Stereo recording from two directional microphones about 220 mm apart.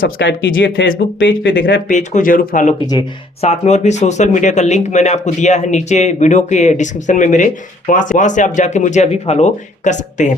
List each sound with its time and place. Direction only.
0.0 s speech: 55° left (ahead or behind)
1.9 s speech: 35° left (ahead or behind)